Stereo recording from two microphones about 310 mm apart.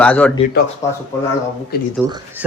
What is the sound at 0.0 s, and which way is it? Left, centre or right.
Speech, centre.